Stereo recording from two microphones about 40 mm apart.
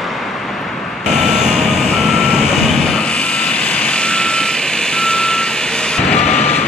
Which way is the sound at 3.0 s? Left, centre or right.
Left.